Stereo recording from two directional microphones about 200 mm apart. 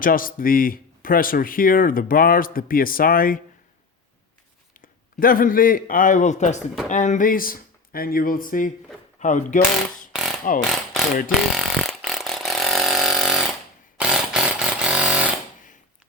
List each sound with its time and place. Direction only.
0.0 s speech: 45° left (ahead or behind)
5.2 s speech: 45° left (ahead or behind)
10.1 s a sound: 5° right (ahead or behind)
10.6 s speech: centre (ahead or behind)
11.3 s ratchet: centre (ahead or behind)
14.0 s a sound: 5° right (ahead or behind)